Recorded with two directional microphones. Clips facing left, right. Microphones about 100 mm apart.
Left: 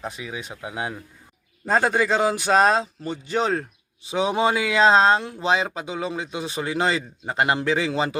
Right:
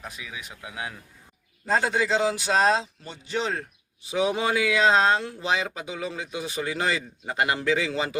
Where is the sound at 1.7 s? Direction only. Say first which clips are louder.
Left 3 dB; 50° left (ahead or behind).